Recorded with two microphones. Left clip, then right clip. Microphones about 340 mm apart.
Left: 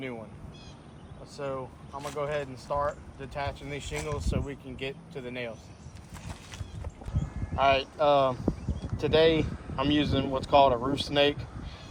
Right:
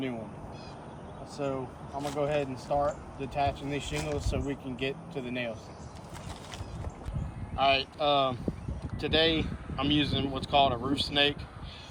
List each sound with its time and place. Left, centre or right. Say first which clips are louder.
1.4 s speech: right 1 dB; centre
7.5 s speech: left 2 dB; left